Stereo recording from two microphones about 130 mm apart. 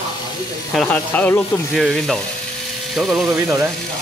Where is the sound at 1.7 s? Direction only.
Centre (ahead or behind).